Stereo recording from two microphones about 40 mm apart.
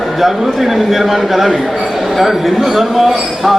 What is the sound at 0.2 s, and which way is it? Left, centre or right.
A man's voice, centre.